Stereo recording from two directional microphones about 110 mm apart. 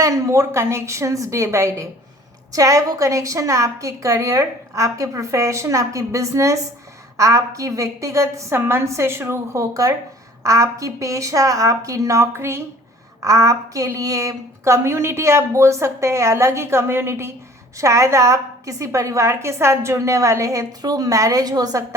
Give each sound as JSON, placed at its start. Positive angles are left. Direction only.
{"t": 0.0, "sound": "a woman's voice", "side_deg": -30}